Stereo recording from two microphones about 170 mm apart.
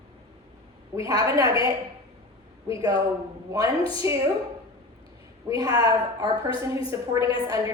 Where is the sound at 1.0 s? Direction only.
20° right (ahead or behind).